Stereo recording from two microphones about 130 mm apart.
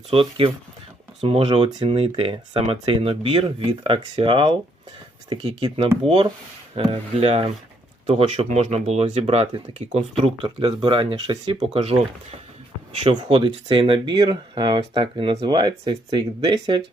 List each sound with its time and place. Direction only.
0.1 s speech: 45° right (ahead or behind)
10.2 s speech: 40° right (ahead or behind)